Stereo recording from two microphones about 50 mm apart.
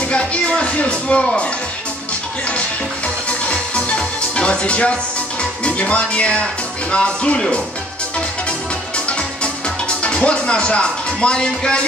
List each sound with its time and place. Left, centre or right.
0.1 s speech: left
3.4 s music: left
5.4 s speech: left
9.4 s music: centre